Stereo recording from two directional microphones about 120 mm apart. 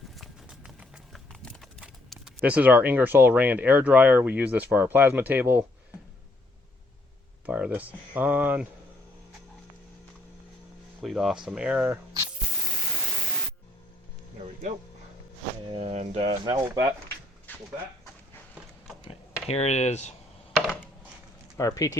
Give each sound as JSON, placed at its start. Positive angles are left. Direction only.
{"t": 0.2, "sound": "clip-clop", "side_deg": -10}
{"t": 1.3, "sound": "clip-clop", "side_deg": 5}
{"t": 2.0, "sound": "speech", "side_deg": -10}
{"t": 7.4, "sound": "speech", "side_deg": -15}
{"t": 11.0, "sound": "speech", "side_deg": -5}
{"t": 15.7, "sound": "speech", "side_deg": -60}
{"t": 16.6, "sound": "speech", "side_deg": -30}
{"t": 17.5, "sound": "a sound", "side_deg": 15}
{"t": 19.5, "sound": "speech", "side_deg": 65}
{"t": 20.6, "sound": "a sound", "side_deg": -5}
{"t": 21.6, "sound": "speech", "side_deg": 30}